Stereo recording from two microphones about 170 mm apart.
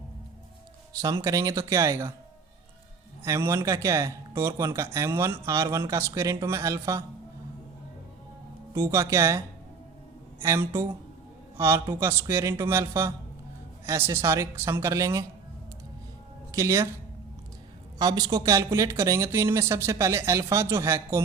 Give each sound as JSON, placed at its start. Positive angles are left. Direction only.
{"t": 0.9, "sound": "speech", "side_deg": -20}
{"t": 3.2, "sound": "speech", "side_deg": -15}
{"t": 8.7, "sound": "speech", "side_deg": -15}
{"t": 10.4, "sound": "speech", "side_deg": -15}
{"t": 16.5, "sound": "speech", "side_deg": -20}
{"t": 18.0, "sound": "speech", "side_deg": -25}